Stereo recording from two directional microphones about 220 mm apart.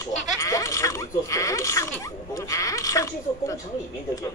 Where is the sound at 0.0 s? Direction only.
15° left (ahead or behind).